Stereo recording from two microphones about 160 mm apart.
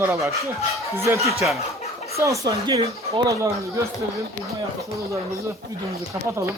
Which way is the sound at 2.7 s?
40° right (ahead or behind).